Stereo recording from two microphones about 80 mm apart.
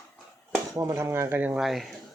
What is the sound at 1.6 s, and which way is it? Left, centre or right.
Speech, centre.